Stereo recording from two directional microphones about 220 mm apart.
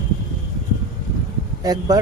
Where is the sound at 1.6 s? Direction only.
15° right (ahead or behind).